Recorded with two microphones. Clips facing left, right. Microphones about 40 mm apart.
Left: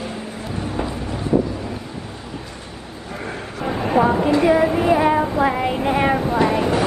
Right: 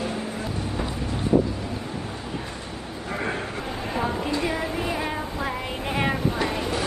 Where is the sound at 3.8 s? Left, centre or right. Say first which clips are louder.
Left 11 dB; left.